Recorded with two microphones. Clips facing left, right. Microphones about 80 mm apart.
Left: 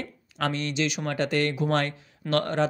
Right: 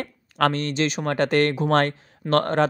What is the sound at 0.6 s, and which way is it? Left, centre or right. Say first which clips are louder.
Speech: right 4 dB; right.